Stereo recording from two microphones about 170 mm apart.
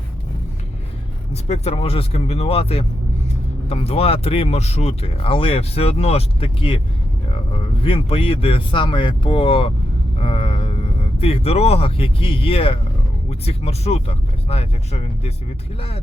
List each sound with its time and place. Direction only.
1.3 s speech: 40° left (ahead or behind)
10.2 s vehicle: 35° left (ahead or behind)
11.2 s speech: 35° left (ahead or behind)